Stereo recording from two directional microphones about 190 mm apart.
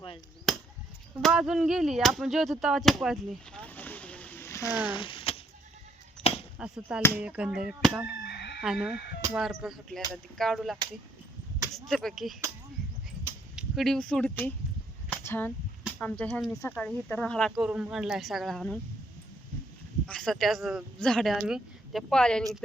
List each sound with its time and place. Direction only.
0.5 s chop: centre (ahead or behind)
1.2 s a sound: 5° right (ahead or behind); by 4.8 s 15° left (ahead or behind)
4.9 s mechanisms: 25° left (ahead or behind)
6.2 s a sound: 5° left (ahead or behind)
6.6 s speech: 5° right (ahead or behind)
8.0 s chicken: 60° left (ahead or behind)
8.6 s speech: 5° right (ahead or behind)
13.6 s speech: centre (ahead or behind)
20.1 s speech: 5° left (ahead or behind)